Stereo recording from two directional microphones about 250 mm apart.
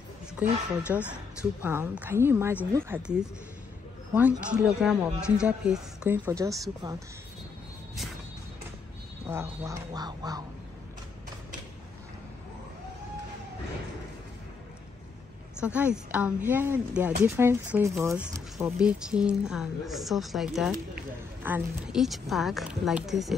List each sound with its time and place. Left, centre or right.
0.4 s a woman's voice: centre
9.3 s a woman's voice: centre
15.6 s a woman's voice: centre